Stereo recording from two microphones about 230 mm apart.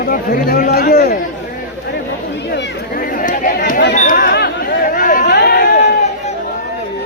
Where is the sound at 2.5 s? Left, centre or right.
Left.